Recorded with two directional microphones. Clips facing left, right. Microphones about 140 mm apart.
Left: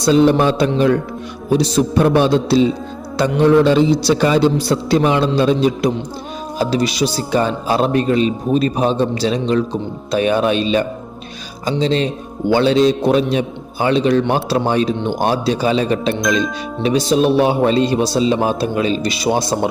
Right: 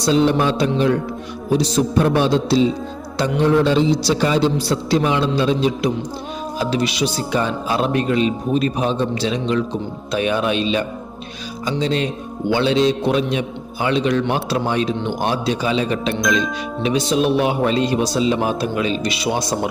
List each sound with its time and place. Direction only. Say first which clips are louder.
0.0 s mantra: left 4 dB; 50° left (ahead or behind)
2.1 s a man's voice: left 4 dB; 55° left (ahead or behind)
11.8 s a man's voice: left 4 dB; 30° left (ahead or behind)
12.5 s a man's voice: left 4 dB; 45° left (ahead or behind)